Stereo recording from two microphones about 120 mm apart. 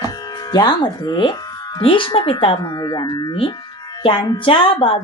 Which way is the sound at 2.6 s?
35° left (ahead or behind).